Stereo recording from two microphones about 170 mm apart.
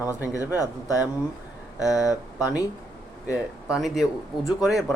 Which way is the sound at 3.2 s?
5° right (ahead or behind).